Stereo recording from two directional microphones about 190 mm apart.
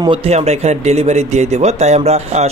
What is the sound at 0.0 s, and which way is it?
Speech, 30° right (ahead or behind).